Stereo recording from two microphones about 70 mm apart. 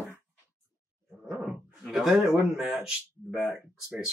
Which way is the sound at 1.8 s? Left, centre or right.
Centre.